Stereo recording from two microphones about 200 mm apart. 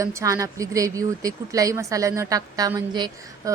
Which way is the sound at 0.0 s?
15° right (ahead or behind).